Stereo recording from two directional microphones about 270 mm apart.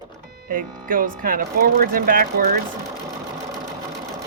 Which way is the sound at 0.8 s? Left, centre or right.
Right.